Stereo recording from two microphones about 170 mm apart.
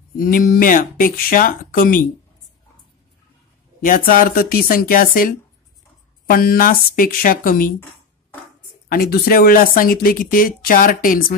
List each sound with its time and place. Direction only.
0.2 s speech: 55° left (ahead or behind)
3.8 s speech: 55° left (ahead or behind)
8.8 s speech: 60° left (ahead or behind)